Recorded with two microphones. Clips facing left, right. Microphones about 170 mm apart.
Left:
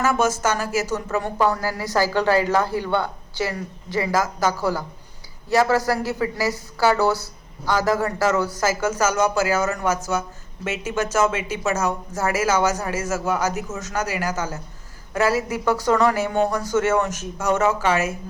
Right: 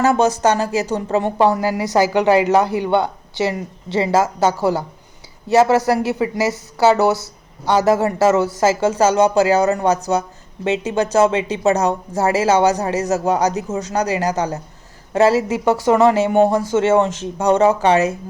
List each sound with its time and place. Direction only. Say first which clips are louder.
0.1 s a woman's voice: right 6 dB; 35° right (ahead or behind)
13.2 s a woman's voice: right 6 dB; 35° right (ahead or behind)